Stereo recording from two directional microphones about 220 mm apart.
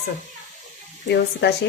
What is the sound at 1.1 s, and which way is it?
Speech, 50° left (ahead or behind).